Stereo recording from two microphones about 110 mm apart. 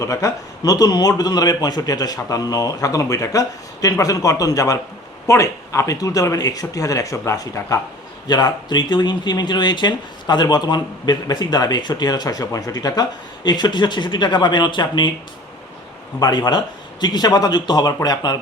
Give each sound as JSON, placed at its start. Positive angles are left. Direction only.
{"t": 0.0, "sound": "speech", "side_deg": 30}
{"t": 16.2, "sound": "speech", "side_deg": 40}